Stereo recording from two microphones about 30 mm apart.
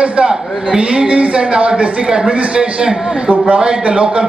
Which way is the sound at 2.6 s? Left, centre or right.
Right.